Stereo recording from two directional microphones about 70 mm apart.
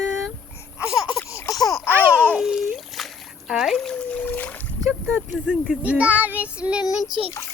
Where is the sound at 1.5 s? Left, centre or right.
Left.